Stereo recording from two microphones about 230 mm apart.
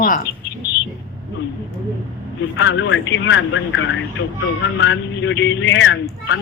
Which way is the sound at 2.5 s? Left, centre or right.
Left.